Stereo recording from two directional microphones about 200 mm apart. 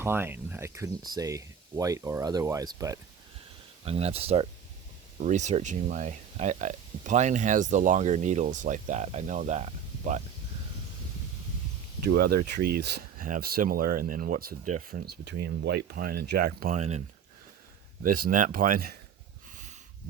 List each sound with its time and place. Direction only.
0.0 s speech: 10° right (ahead or behind)
3.8 s speech: 30° right (ahead or behind)
12.0 s speech: 50° right (ahead or behind); by 17.0 s 35° right (ahead or behind)
18.0 s speech: 45° right (ahead or behind)